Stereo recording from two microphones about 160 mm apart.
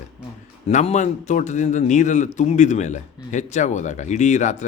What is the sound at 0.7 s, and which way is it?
A man's voice, 50° left (ahead or behind).